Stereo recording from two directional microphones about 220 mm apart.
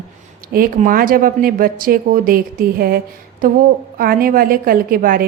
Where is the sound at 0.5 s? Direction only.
40° right (ahead or behind).